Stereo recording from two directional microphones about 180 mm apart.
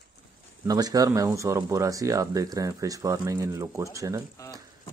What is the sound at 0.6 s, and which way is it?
Speech, 20° right (ahead or behind).